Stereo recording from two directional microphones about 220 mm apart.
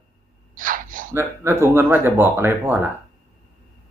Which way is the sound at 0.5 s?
40° right (ahead or behind).